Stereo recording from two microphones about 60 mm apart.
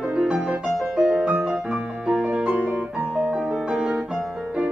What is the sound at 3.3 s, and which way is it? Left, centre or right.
Music, centre.